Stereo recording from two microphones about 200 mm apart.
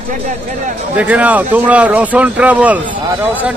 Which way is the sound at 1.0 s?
5° right (ahead or behind).